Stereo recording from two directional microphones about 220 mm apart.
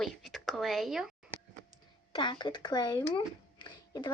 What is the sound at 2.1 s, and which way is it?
Speech, 20° left (ahead or behind).